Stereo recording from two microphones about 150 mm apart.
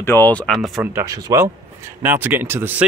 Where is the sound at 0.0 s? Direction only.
15° left (ahead or behind).